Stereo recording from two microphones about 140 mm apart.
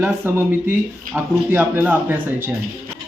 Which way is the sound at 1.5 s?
15° right (ahead or behind).